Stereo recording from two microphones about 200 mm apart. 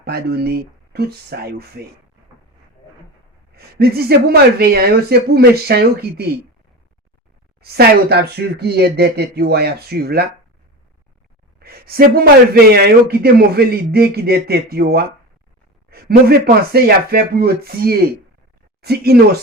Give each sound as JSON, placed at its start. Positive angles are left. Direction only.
{"t": 0.0, "sound": "a man's voice", "side_deg": -50}
{"t": 3.5, "sound": "a man's voice", "side_deg": -50}
{"t": 7.6, "sound": "a man's voice", "side_deg": -50}
{"t": 11.6, "sound": "a man's voice", "side_deg": -50}
{"t": 15.9, "sound": "a sound", "side_deg": -50}
{"t": 16.7, "sound": "a man's voice", "side_deg": -50}